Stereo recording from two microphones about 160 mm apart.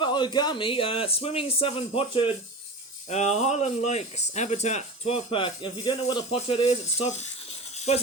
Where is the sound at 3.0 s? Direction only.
45° left (ahead or behind).